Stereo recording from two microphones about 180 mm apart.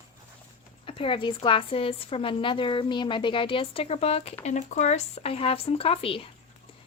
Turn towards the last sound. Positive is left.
turn(degrees=30)  # may be behind; listen again after turning